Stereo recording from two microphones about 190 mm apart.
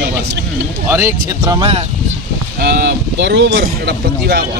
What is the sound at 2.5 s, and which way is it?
Speech, 60° right (ahead or behind).